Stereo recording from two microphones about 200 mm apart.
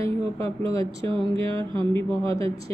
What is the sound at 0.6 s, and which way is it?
Speech, 25° right (ahead or behind).